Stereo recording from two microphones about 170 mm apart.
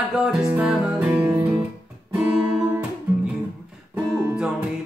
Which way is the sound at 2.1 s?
10° right (ahead or behind).